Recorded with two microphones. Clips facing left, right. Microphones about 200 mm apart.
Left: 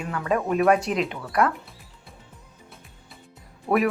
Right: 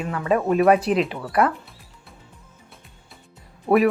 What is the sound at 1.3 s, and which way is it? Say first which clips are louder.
Music: right 2 dB; centre (ahead or behind).